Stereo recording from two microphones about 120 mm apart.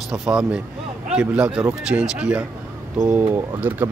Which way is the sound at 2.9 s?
20° right (ahead or behind).